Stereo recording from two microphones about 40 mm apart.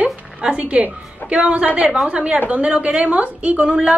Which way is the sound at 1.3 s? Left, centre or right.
Right.